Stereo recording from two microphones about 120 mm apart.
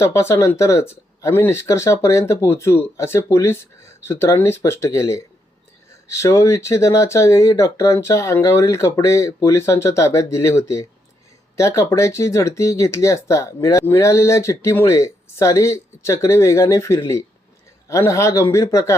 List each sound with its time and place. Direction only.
0.0 s speech: 20° left (ahead or behind)